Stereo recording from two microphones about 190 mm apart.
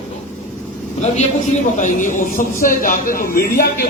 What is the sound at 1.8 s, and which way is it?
A woman's voice, 40° left (ahead or behind).